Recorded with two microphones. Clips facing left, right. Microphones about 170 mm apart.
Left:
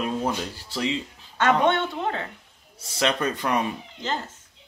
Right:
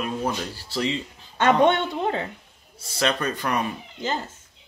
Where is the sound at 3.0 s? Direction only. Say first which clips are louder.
Even; 20° left (ahead or behind).